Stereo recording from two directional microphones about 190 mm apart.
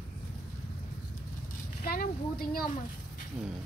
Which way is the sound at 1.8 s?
50° left (ahead or behind).